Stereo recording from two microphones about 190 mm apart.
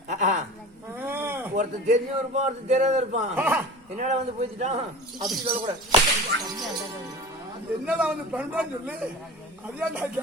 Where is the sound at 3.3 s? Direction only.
10° right (ahead or behind).